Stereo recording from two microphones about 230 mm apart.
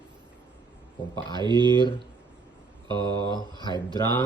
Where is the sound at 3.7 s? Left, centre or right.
Centre.